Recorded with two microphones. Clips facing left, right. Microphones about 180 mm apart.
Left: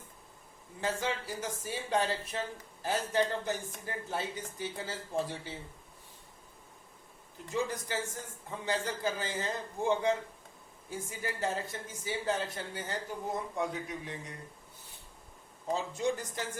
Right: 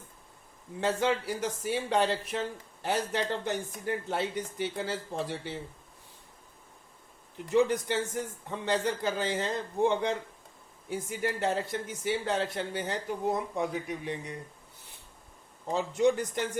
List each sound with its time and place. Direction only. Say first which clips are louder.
0.8 s speech: right 6 dB; 70° right (ahead or behind)
7.3 s speech: right 9 dB; 70° right (ahead or behind)
15.7 s speech: right 6 dB; 65° right (ahead or behind)